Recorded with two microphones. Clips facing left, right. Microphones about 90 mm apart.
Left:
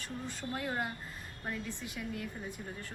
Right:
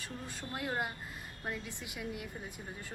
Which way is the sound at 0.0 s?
10° right (ahead or behind).